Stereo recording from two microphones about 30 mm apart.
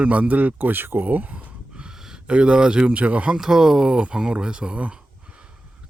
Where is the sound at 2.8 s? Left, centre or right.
Right.